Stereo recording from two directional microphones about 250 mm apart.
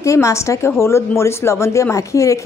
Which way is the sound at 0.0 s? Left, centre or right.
Centre.